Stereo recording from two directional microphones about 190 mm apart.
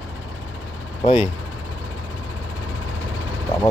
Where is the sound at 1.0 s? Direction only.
30° left (ahead or behind).